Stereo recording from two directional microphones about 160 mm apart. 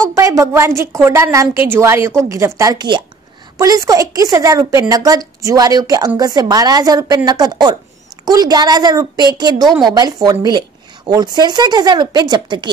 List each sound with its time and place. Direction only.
0.0 s a woman's voice: 20° right (ahead or behind)